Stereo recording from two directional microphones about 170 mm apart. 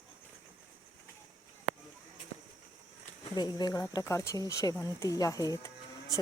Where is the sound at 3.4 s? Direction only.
25° left (ahead or behind).